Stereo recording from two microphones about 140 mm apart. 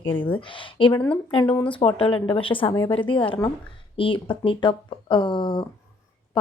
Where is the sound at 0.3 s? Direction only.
35° left (ahead or behind).